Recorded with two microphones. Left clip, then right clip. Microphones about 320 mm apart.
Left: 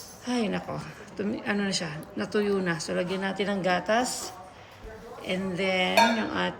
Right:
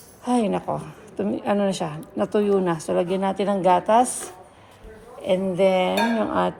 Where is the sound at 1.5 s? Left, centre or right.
Centre.